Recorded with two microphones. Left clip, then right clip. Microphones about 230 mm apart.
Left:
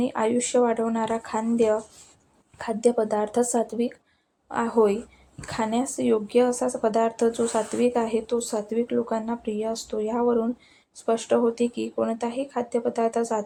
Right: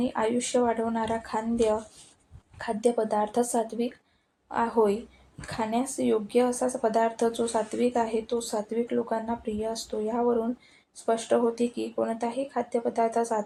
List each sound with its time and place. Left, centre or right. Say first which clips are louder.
0.0 s speech: left 3 dB; left